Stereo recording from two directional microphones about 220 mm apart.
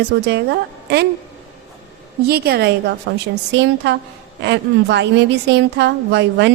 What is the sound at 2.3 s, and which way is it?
A woman's voice, 45° right (ahead or behind).